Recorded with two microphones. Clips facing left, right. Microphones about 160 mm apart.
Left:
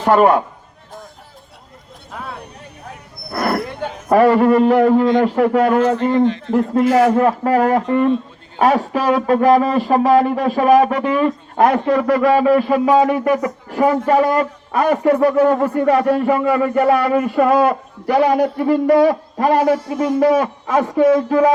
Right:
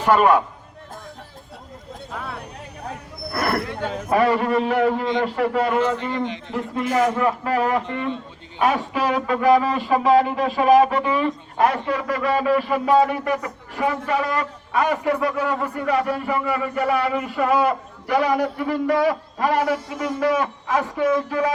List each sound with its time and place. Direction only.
0.0 s a man's voice: 40° left (ahead or behind)
4.1 s speech: 45° left (ahead or behind)
6.5 s a man's voice: 40° left (ahead or behind)